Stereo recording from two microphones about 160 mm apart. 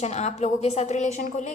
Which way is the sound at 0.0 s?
45° left (ahead or behind).